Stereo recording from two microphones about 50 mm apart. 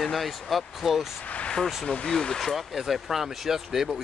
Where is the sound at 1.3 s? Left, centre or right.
Left.